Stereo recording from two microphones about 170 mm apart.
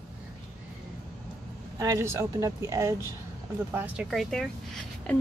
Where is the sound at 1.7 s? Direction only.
20° right (ahead or behind).